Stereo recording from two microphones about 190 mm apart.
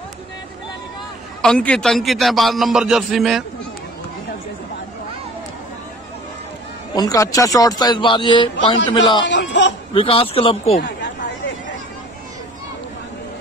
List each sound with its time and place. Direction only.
1.4 s a man's voice: 5° left (ahead or behind)
6.9 s a man's voice: 20° left (ahead or behind)
9.3 s a sound: 70° left (ahead or behind)
9.9 s a man's voice: 30° left (ahead or behind)
10.8 s chatter: 65° left (ahead or behind)